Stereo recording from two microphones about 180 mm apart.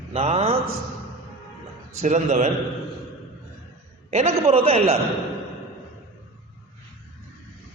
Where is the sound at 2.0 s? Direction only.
40° right (ahead or behind).